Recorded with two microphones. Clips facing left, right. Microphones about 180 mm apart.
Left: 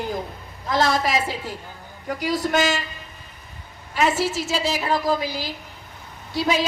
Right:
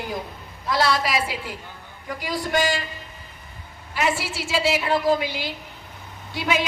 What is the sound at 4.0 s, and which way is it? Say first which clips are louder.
A woman's voice: left 4 dB; 40° left (ahead or behind).